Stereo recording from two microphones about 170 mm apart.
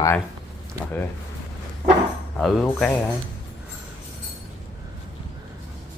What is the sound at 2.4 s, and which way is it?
Speech, 5° left (ahead or behind).